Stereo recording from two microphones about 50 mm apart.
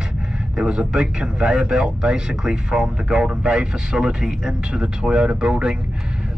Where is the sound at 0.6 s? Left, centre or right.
Centre.